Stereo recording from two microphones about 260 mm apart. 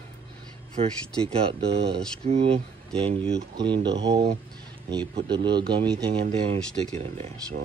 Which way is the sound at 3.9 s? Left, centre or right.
Right.